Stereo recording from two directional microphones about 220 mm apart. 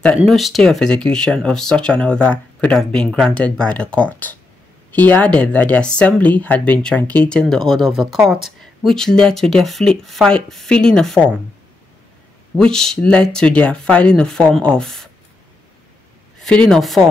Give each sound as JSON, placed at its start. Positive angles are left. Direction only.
{"t": 0.3, "sound": "speech", "side_deg": 0}
{"t": 12.5, "sound": "speech", "side_deg": 5}
{"t": 16.3, "sound": "speech", "side_deg": 5}